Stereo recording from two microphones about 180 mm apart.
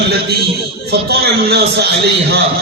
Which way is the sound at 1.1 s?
65° right (ahead or behind).